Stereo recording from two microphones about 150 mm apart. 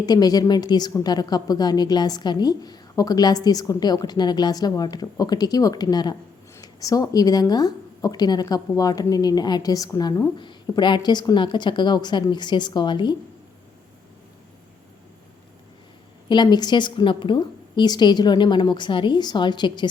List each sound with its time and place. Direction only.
0.0 s a woman's voice: 25° left (ahead or behind)
16.3 s a woman's voice: 30° left (ahead or behind)